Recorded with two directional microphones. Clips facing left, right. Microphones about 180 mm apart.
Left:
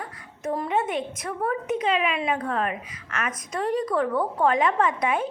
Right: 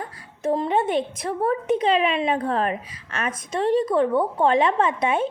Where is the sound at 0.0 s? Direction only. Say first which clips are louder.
Right 5 dB; 25° right (ahead or behind).